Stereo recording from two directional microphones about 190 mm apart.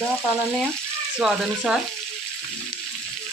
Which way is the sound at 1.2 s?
Centre (ahead or behind).